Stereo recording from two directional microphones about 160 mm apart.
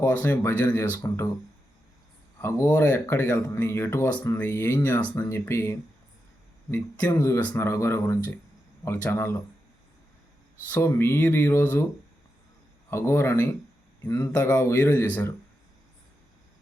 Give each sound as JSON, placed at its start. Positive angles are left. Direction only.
{"t": 0.0, "sound": "speech", "side_deg": 10}
{"t": 2.4, "sound": "speech", "side_deg": 15}
{"t": 10.8, "sound": "speech", "side_deg": 15}
{"t": 12.9, "sound": "speech", "side_deg": 15}